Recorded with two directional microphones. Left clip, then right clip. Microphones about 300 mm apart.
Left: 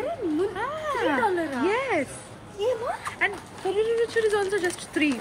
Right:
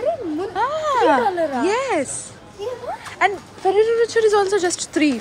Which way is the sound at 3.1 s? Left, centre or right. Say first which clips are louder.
Right 13 dB; centre.